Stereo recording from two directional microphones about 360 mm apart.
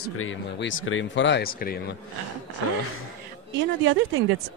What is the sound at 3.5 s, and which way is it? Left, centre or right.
Speech, right.